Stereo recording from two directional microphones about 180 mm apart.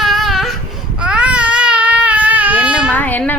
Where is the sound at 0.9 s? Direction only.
5° right (ahead or behind).